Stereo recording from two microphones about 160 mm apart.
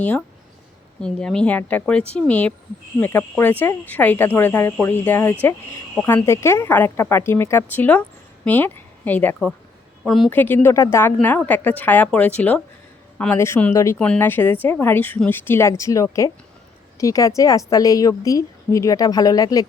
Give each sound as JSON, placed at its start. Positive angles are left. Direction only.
{"t": 0.0, "sound": "speech", "side_deg": 10}
{"t": 10.0, "sound": "speech", "side_deg": 0}
{"t": 10.2, "sound": "a woman's voice", "side_deg": 10}